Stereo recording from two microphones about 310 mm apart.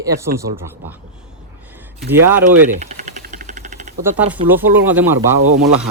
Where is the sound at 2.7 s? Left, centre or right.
Right.